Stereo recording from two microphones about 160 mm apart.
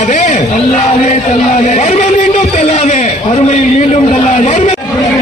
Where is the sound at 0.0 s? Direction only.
50° left (ahead or behind).